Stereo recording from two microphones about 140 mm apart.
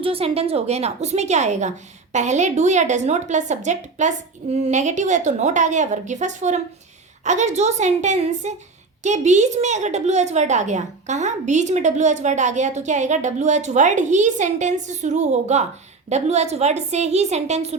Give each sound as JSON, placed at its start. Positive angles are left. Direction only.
{"t": 0.0, "sound": "a woman's voice", "side_deg": -45}